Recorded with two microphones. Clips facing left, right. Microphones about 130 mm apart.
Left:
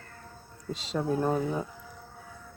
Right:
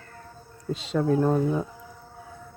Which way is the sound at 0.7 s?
Centre (ahead or behind).